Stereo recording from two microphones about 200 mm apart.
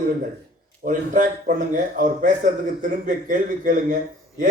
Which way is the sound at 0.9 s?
40° right (ahead or behind).